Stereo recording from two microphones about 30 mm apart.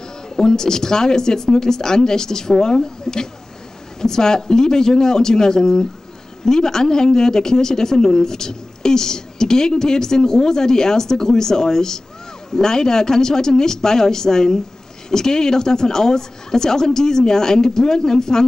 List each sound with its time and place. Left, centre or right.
0.4 s speech: left